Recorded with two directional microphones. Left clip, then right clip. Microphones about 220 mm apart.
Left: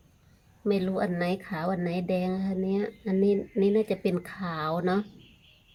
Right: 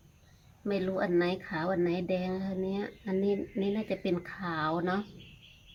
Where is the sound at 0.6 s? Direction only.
45° left (ahead or behind).